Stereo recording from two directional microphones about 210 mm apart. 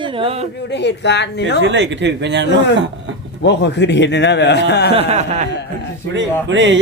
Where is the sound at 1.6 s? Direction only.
60° right (ahead or behind).